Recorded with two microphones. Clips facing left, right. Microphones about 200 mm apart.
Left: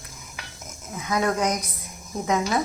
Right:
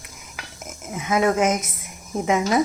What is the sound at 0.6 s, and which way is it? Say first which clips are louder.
Speech: right 4 dB; 25° right (ahead or behind).